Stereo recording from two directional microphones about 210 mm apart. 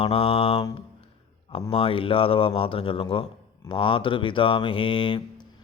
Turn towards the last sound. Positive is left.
turn(degrees=25)  # may be behind; listen again after turning